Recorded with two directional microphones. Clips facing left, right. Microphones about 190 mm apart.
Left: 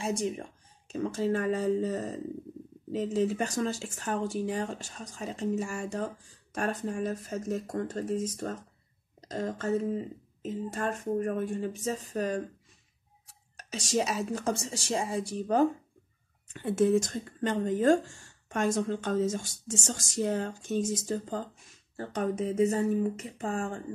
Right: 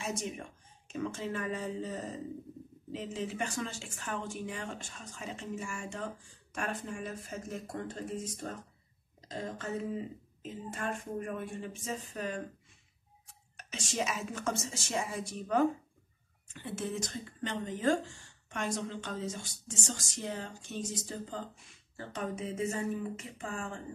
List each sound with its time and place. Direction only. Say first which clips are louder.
0.0 s speech: left 7 dB; 30° left (ahead or behind)
10.7 s speech: left 5 dB; 40° left (ahead or behind)
16.6 s speech: left 12 dB; 50° left (ahead or behind)